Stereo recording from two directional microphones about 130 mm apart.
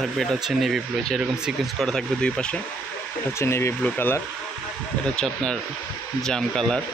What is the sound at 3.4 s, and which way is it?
Speech, 20° left (ahead or behind).